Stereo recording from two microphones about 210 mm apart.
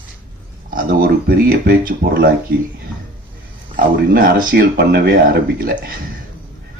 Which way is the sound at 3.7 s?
50° right (ahead or behind).